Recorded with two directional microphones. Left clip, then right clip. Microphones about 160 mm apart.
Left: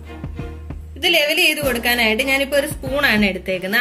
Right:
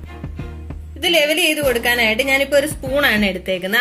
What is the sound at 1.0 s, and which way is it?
A woman's voice, 30° right (ahead or behind).